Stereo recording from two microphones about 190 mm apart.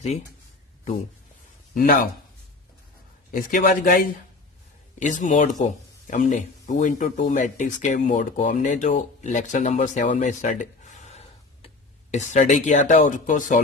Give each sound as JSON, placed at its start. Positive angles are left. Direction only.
{"t": 1.7, "sound": "speech", "side_deg": 45}
{"t": 3.3, "sound": "speech", "side_deg": 45}